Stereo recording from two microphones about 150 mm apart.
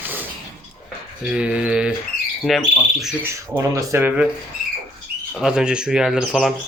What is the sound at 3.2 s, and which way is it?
Speech, 15° right (ahead or behind).